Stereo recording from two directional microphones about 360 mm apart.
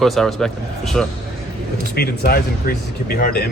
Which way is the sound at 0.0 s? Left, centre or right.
Centre.